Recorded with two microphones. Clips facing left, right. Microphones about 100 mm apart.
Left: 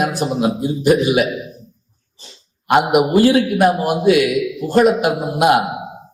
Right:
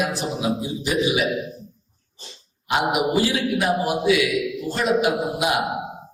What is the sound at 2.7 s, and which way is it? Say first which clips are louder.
A man's voice: left 7 dB; 55° left (ahead or behind).